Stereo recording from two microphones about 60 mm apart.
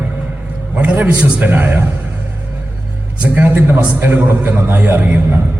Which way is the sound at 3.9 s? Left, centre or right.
Right.